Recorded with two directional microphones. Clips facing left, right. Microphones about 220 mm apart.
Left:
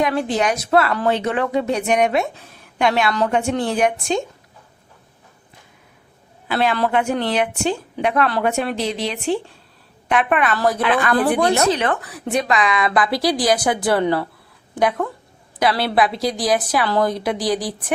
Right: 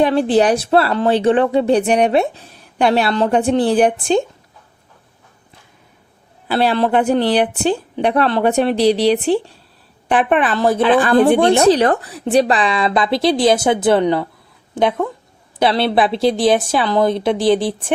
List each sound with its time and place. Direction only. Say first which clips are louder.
0.0 s speech: right 6 dB; 30° right (ahead or behind)
6.5 s speech: right 4 dB; 35° right (ahead or behind)
15.5 s speech: right 3 dB; 25° right (ahead or behind)